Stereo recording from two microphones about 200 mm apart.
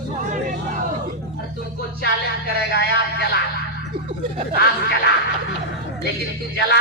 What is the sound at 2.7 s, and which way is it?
Speech, 55° left (ahead or behind).